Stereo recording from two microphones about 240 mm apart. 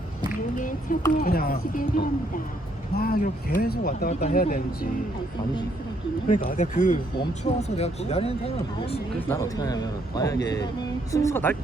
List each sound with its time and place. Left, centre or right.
0.5 s speech: left
4.1 s speech: left
4.4 s speech: left
6.4 s speech: left
9.2 s a man's voice: centre